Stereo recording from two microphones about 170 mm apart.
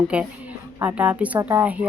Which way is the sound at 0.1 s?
10° right (ahead or behind).